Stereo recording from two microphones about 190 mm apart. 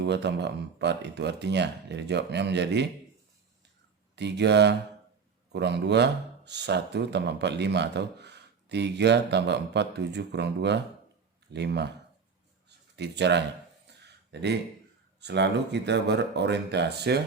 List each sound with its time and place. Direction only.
0.0 s speech: 65° right (ahead or behind)
4.1 s speech: 65° right (ahead or behind)
12.6 s a sound: 65° right (ahead or behind)
14.3 s speech: 60° right (ahead or behind)